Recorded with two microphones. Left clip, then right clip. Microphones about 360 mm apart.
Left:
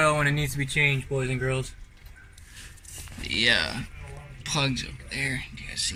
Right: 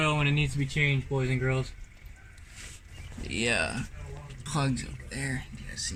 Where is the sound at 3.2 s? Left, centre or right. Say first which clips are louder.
Left 5 dB; centre.